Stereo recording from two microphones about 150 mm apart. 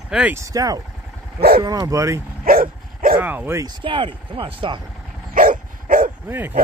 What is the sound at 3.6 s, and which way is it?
Speech, 35° right (ahead or behind).